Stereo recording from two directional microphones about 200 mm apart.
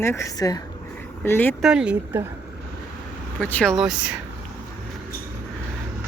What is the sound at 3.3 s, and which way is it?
Speech, 5° left (ahead or behind).